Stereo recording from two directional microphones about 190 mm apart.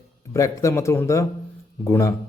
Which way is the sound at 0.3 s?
15° left (ahead or behind).